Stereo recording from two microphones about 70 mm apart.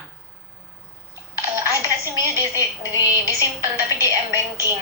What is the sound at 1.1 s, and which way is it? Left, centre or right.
Dishes, right.